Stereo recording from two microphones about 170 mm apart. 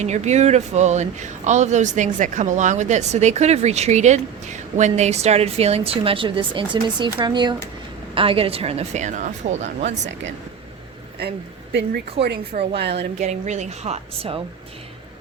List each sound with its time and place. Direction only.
0.0 s speech: 40° right (ahead or behind)
11.2 s speech: 80° right
12.2 s a woman's voice: 90° right
13.0 s speech: 40° right (ahead or behind)